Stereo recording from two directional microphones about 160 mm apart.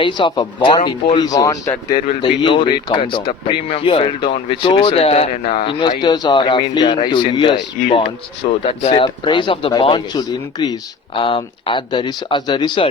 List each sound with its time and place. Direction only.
0.0 s speech: 30° left (ahead or behind)
6.0 s speech: 25° left (ahead or behind)
7.9 s speech: 45° left (ahead or behind); by 12.9 s 30° left (ahead or behind)